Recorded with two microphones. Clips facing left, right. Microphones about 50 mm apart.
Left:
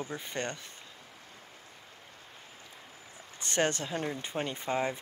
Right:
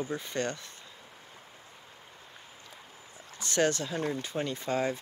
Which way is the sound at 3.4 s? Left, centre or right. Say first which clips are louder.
Right 2 dB; left.